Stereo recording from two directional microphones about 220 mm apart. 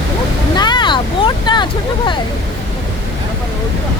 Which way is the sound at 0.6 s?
20° left (ahead or behind).